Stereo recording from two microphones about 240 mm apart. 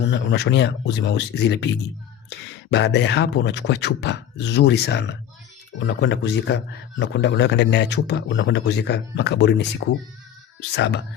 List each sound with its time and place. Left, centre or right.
0.1 s a man's voice: left